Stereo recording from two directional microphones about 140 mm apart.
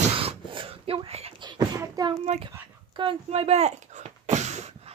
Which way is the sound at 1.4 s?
30° right (ahead or behind).